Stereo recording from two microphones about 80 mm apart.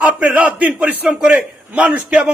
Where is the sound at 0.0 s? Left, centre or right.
Centre.